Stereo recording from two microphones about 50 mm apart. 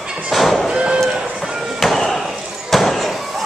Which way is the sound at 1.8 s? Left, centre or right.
Centre.